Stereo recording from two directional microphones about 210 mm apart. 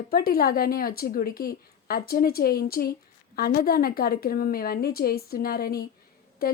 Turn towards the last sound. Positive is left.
turn(degrees=45)  # may be behind; listen again after turning